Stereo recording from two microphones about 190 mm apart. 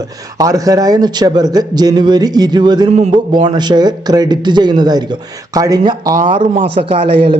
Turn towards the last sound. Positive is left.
turn(degrees=-25)  # may be behind; listen again after turning